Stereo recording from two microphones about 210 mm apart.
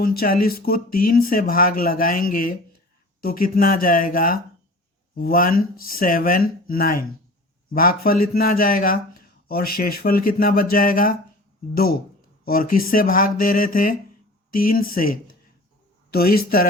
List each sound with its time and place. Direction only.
0.0 s a man's voice: 45° left (ahead or behind)
12.5 s a man's voice: 45° left (ahead or behind)
16.1 s a man's voice: 45° left (ahead or behind)